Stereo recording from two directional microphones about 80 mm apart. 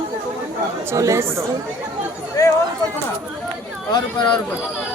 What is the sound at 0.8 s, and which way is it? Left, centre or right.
Speech, right.